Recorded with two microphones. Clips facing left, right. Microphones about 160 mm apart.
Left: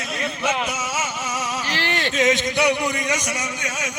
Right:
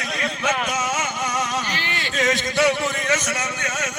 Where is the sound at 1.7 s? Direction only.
75° left (ahead or behind).